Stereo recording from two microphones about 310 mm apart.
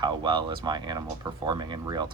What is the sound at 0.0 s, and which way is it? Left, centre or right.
Speech, centre.